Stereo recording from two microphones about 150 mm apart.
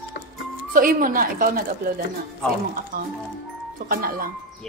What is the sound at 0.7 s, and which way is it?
Speech, 70° right (ahead or behind).